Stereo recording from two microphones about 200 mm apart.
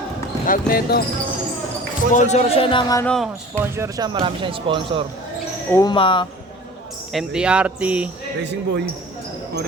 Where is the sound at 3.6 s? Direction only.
15° right (ahead or behind).